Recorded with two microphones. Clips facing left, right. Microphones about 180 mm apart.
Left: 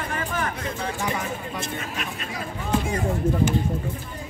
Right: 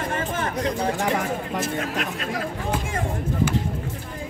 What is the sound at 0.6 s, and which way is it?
Speech, 75° right (ahead or behind).